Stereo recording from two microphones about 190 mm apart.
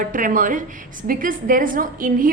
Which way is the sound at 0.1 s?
45° right (ahead or behind).